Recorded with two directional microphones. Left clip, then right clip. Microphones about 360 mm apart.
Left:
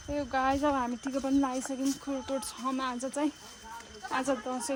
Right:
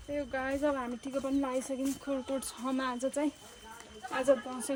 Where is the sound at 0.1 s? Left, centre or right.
Centre.